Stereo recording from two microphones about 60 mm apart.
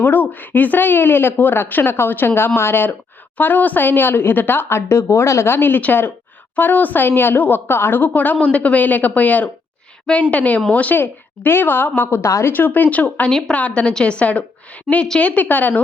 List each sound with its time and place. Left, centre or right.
0.0 s speech: left
5.5 s speech: left
12.1 s a woman's voice: left
12.5 s speech: left
14.9 s a woman's voice: centre
15.2 s speech: left